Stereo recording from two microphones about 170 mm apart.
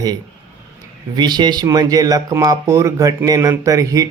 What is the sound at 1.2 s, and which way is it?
Speech, 25° right (ahead or behind).